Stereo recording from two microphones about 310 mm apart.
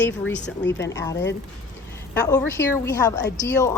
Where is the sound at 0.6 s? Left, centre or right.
Left.